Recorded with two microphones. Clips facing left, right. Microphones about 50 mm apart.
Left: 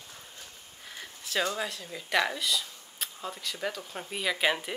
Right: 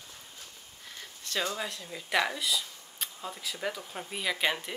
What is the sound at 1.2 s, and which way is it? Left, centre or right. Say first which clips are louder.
Speech: left 3 dB; centre.